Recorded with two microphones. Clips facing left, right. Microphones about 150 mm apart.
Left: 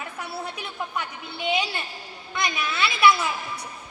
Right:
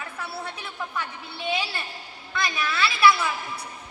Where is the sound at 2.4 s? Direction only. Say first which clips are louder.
Even; 20° left (ahead or behind).